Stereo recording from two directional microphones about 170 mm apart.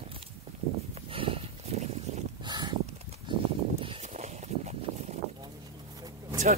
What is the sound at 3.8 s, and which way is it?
Horse, 35° right (ahead or behind).